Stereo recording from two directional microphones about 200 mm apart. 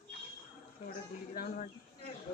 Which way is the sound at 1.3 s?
45° left (ahead or behind).